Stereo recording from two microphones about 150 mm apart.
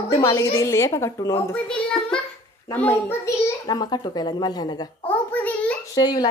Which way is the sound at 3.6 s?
30° left (ahead or behind).